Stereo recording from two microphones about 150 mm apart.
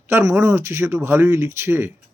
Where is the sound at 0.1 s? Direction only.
15° right (ahead or behind).